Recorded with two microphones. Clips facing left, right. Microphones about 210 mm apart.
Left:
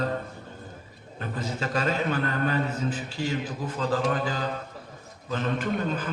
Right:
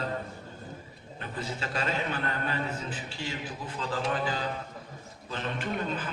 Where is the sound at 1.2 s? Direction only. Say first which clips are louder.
Left 5 dB; 40° left (ahead or behind).